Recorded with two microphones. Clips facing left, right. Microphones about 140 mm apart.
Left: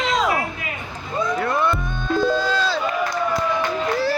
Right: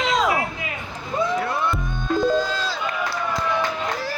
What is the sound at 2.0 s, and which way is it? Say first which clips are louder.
Music: even; 75° left (ahead or behind).